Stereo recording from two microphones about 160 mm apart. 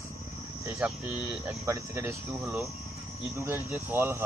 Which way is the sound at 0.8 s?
5° right (ahead or behind).